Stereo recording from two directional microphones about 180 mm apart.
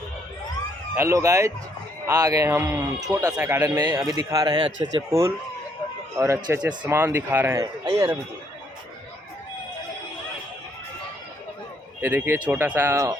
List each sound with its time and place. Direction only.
0.9 s a man's voice: 15° right (ahead or behind)
12.0 s a man's voice: 10° right (ahead or behind)